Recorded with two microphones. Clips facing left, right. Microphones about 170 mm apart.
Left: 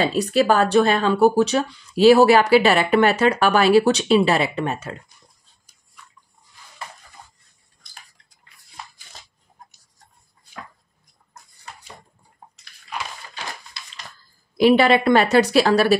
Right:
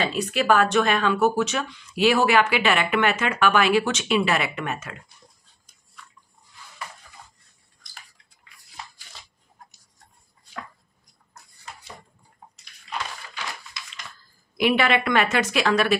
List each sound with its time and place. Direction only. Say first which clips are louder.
0.0 s speech: left 6 dB; 35° left (ahead or behind)
13.4 s a sound: left 1 dB; 30° left (ahead or behind)
14.6 s speech: left 6 dB; 30° left (ahead or behind)